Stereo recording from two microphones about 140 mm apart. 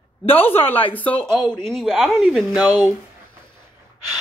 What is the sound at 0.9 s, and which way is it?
A woman's voice, 10° left (ahead or behind).